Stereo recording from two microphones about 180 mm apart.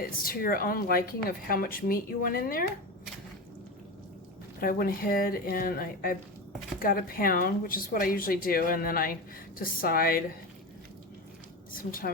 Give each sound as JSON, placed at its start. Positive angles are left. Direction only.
{"t": 0.2, "sound": "speech", "side_deg": 55}
{"t": 4.6, "sound": "a woman's voice", "side_deg": 55}
{"t": 11.7, "sound": "speech", "side_deg": 50}